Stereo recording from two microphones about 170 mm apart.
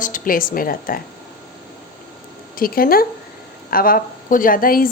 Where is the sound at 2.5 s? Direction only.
60° left (ahead or behind).